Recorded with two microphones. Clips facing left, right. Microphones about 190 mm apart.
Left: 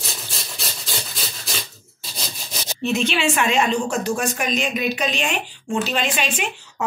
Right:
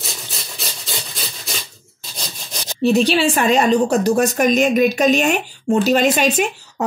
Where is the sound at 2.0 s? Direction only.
5° left (ahead or behind).